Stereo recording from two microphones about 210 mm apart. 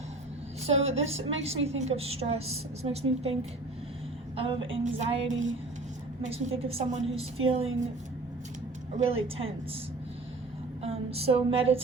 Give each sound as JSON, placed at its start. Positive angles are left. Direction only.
{"t": 0.6, "sound": "a woman's voice", "side_deg": -30}
{"t": 4.4, "sound": "a woman's voice", "side_deg": -25}
{"t": 4.8, "sound": "music", "side_deg": -35}
{"t": 6.2, "sound": "a woman's voice", "side_deg": -30}
{"t": 9.0, "sound": "a woman's voice", "side_deg": -30}
{"t": 10.8, "sound": "a woman's voice", "side_deg": -30}